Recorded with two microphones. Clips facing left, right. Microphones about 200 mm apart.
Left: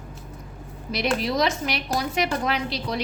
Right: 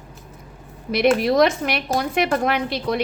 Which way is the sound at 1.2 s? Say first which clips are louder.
Right 7 dB; 55° right (ahead or behind).